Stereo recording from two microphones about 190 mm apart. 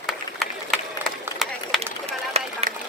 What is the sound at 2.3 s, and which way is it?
Run, 35° right (ahead or behind).